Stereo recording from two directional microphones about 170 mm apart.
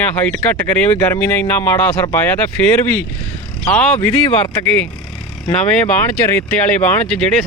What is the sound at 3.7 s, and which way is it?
Speech, 10° left (ahead or behind).